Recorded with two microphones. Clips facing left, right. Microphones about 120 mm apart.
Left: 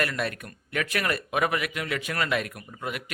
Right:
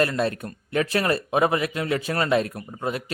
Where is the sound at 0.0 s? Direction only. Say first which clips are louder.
Right 6 dB; 30° right (ahead or behind).